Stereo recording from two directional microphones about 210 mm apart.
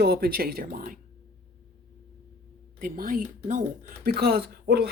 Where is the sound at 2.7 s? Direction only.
40° right (ahead or behind).